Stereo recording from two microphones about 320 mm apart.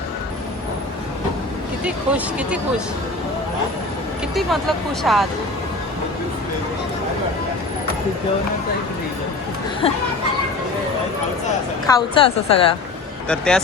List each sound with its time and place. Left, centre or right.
1.8 s speech: centre
5.0 s speech: centre
9.8 s a woman's voice: centre
11.9 s a woman's voice: centre
13.2 s speech: centre